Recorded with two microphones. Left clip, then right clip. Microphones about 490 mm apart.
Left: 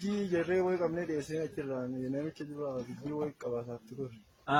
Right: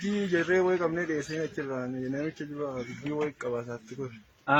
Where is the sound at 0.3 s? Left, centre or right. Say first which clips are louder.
Right 5 dB; left.